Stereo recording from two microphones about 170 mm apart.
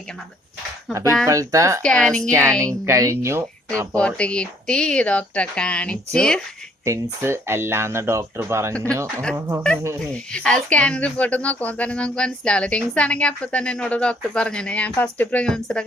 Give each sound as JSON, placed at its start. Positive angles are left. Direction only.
{"t": 1.3, "sound": "speech", "side_deg": -20}
{"t": 1.8, "sound": "a woman's voice", "side_deg": 5}
{"t": 2.6, "sound": "speech", "side_deg": -20}
{"t": 3.9, "sound": "a woman's voice", "side_deg": 5}
{"t": 6.8, "sound": "speech", "side_deg": -15}
{"t": 8.7, "sound": "a woman's voice", "side_deg": 5}
{"t": 9.3, "sound": "speech", "side_deg": -15}
{"t": 10.1, "sound": "a woman's voice", "side_deg": 5}